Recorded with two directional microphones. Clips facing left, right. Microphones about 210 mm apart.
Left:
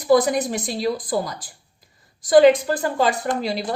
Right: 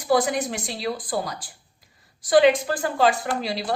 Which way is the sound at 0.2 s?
35° left (ahead or behind).